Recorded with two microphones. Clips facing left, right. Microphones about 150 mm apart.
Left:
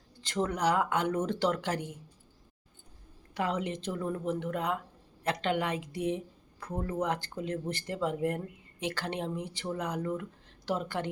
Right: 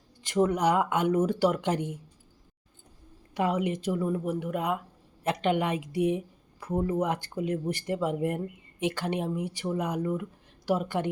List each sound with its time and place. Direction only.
0.2 s a woman's voice: 15° right (ahead or behind)
3.3 s a woman's voice: 15° right (ahead or behind)